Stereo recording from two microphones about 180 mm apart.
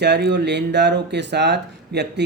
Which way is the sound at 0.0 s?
70° right (ahead or behind).